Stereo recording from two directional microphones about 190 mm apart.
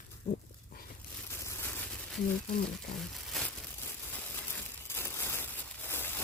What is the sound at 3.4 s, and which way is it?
Crumpling, centre (ahead or behind).